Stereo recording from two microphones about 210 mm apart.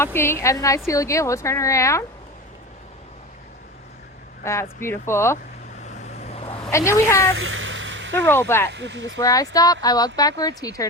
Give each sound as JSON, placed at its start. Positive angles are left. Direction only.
{"t": 0.0, "sound": "a woman's voice", "side_deg": 10}
{"t": 4.4, "sound": "a woman's voice", "side_deg": 10}
{"t": 5.8, "sound": "vehicle", "side_deg": 30}
{"t": 6.7, "sound": "a woman's voice", "side_deg": 15}
{"t": 7.3, "sound": "a sound", "side_deg": -70}
{"t": 8.3, "sound": "a woman's voice", "side_deg": 10}
{"t": 8.7, "sound": "speech", "side_deg": -60}
{"t": 9.2, "sound": "a woman's voice", "side_deg": 15}